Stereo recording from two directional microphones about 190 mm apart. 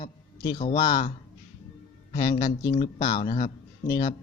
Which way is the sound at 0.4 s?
25° left (ahead or behind).